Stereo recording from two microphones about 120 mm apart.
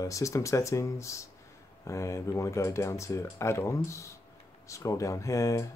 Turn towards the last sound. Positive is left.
turn(degrees=25)  # may be behind; listen again after turning